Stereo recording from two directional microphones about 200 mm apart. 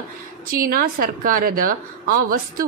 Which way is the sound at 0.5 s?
45° right (ahead or behind).